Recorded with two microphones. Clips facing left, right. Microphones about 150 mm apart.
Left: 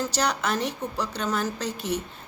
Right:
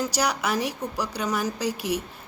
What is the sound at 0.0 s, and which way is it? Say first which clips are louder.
A woman's voice: right 1 dB; 10° right (ahead or behind).